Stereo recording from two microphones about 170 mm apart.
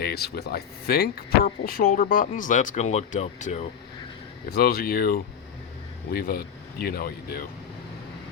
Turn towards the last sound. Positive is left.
turn(degrees=60)  # may be behind; listen again after turning